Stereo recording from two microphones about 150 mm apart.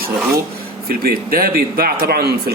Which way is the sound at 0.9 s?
80° right.